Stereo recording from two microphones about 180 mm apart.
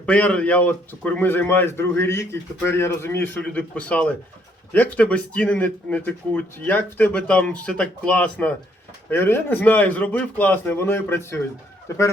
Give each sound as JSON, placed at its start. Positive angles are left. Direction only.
{"t": 0.0, "sound": "a man's voice", "side_deg": 5}